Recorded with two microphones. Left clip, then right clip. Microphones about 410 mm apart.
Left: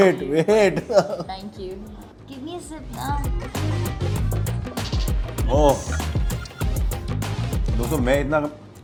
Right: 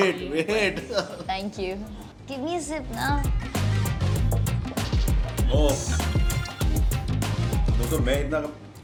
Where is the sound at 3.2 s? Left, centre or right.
Centre.